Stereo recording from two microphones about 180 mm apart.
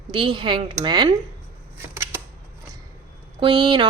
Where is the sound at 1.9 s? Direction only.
15° right (ahead or behind).